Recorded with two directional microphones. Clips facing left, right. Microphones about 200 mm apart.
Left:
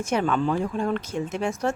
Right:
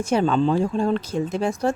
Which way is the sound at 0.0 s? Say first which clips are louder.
Right 4 dB; 30° right (ahead or behind).